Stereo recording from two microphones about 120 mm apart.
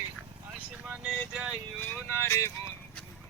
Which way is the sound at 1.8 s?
15° left (ahead or behind).